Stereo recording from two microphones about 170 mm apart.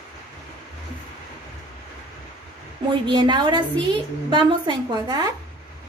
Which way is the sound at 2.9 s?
25° right (ahead or behind).